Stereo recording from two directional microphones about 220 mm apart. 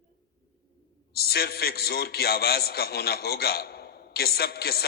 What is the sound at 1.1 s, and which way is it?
A man's voice, 45° left (ahead or behind).